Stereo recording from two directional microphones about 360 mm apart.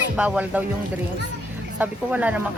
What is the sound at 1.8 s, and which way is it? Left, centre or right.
Speech, centre.